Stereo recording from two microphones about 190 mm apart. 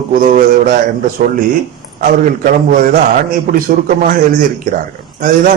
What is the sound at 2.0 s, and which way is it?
A man's voice, 45° right (ahead or behind).